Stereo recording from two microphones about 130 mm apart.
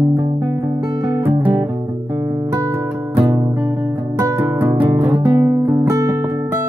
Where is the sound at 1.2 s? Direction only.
15° right (ahead or behind).